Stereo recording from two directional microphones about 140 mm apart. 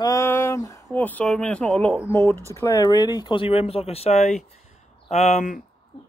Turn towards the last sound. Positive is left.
turn(degrees=55)  # may be behind; listen again after turning